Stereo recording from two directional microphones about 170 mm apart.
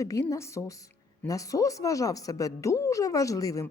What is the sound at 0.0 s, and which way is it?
A woman's voice, 20° left (ahead or behind).